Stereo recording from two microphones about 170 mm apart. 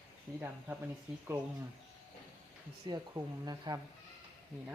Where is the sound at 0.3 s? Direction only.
15° right (ahead or behind).